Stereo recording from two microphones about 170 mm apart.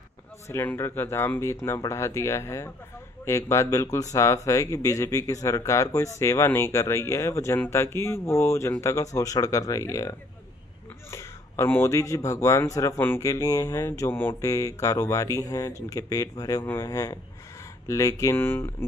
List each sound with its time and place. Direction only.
0.5 s speech: 15° left (ahead or behind)